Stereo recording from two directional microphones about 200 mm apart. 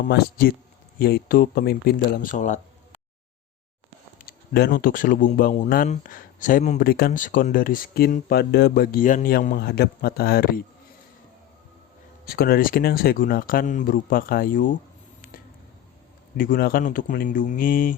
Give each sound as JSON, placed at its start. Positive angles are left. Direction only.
{"t": 0.1, "sound": "speech", "side_deg": 50}
{"t": 4.2, "sound": "speech", "side_deg": 50}
{"t": 12.2, "sound": "speech", "side_deg": 50}
{"t": 16.4, "sound": "speech", "side_deg": 45}